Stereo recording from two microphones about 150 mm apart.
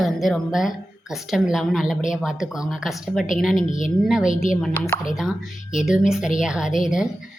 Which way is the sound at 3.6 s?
55° left (ahead or behind).